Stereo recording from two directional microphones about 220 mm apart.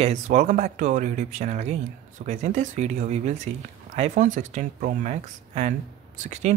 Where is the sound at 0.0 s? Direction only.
30° right (ahead or behind).